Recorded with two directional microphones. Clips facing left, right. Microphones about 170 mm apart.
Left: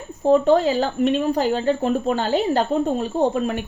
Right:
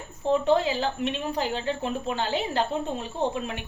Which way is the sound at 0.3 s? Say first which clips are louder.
Left 7 dB; 40° left (ahead or behind).